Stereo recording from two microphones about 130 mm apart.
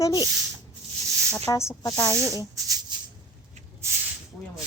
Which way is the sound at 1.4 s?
20° left (ahead or behind).